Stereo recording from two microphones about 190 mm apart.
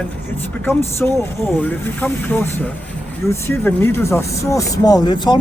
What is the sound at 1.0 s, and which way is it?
Speech, 5° left (ahead or behind).